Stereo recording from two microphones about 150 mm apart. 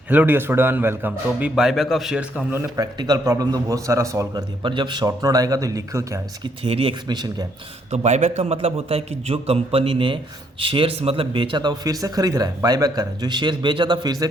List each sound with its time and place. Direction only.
0.1 s a man's voice: 10° right (ahead or behind)
4.6 s speech: 30° right (ahead or behind)
6.4 s a man's voice: 40° right (ahead or behind)
7.9 s a man's voice: 50° right (ahead or behind); by 14.3 s 25° right (ahead or behind)